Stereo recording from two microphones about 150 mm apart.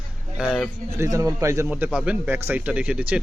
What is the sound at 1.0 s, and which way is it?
A man's voice, 20° right (ahead or behind).